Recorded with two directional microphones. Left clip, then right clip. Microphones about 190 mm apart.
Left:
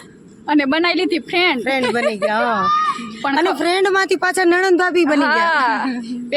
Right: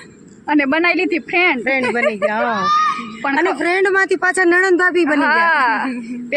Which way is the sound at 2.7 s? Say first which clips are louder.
Right 5 dB; 70° right (ahead or behind).